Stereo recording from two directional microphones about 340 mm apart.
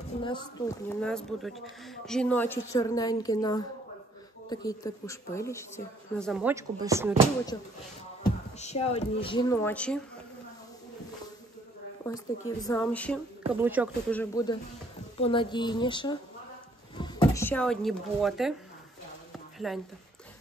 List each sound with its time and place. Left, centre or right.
0.2 s speech: centre
8.5 s speech: centre
12.1 s speech: centre
13.4 s speech: centre
13.7 s speech: centre
19.6 s speech: centre